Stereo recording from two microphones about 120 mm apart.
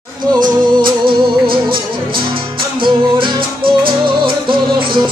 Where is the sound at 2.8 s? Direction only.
45° right (ahead or behind).